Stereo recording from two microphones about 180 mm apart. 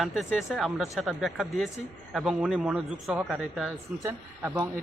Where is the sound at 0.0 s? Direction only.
Centre (ahead or behind).